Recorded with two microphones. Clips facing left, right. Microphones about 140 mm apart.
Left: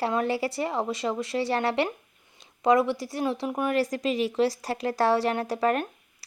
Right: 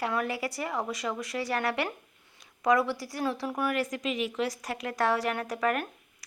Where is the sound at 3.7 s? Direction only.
35° left (ahead or behind).